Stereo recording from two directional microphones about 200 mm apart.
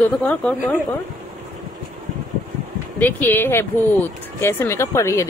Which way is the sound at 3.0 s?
10° left (ahead or behind).